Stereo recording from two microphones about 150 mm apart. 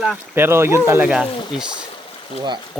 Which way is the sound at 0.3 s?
15° right (ahead or behind).